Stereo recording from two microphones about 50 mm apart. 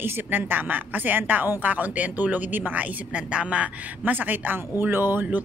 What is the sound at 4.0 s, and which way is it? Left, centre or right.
Speech, right.